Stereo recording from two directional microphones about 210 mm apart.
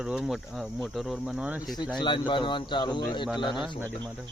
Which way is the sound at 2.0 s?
20° left (ahead or behind).